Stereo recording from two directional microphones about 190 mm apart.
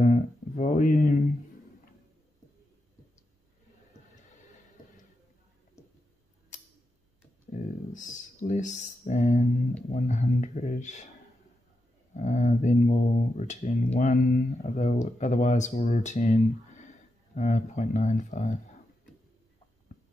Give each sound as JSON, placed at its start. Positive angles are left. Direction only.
{"t": 0.0, "sound": "guitar", "side_deg": 40}
{"t": 5.8, "sound": "a sound", "side_deg": 15}
{"t": 7.5, "sound": "music", "side_deg": 40}
{"t": 9.9, "sound": "speech", "side_deg": 40}
{"t": 12.2, "sound": "speech", "side_deg": 40}
{"t": 14.6, "sound": "speech", "side_deg": 40}